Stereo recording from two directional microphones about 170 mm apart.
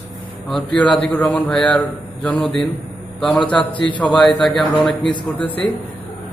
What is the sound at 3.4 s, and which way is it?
Speech, 30° left (ahead or behind).